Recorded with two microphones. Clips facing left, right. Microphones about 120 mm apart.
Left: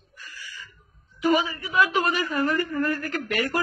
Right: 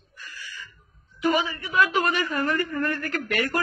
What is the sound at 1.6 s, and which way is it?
Speech, 5° left (ahead or behind).